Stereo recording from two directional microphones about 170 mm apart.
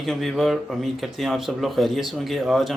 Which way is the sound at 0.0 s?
Centre (ahead or behind).